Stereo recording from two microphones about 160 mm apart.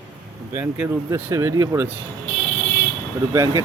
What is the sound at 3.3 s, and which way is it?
Speech, 15° right (ahead or behind).